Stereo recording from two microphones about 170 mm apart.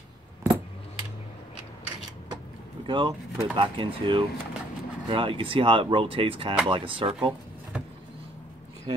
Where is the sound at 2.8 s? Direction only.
30° right (ahead or behind).